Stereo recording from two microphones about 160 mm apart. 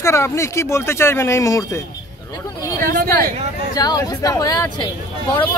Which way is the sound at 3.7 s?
25° left (ahead or behind).